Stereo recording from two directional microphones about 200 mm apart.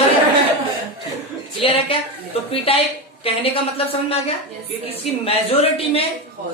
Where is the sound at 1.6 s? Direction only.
30° left (ahead or behind).